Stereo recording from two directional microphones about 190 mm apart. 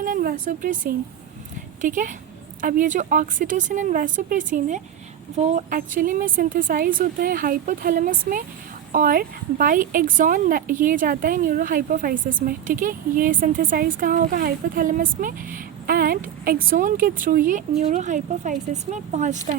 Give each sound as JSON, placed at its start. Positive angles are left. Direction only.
{"t": 0.0, "sound": "speech", "side_deg": -50}